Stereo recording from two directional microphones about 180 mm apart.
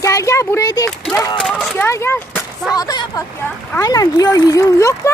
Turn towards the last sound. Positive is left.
turn(degrees=15)  # may be behind; listen again after turning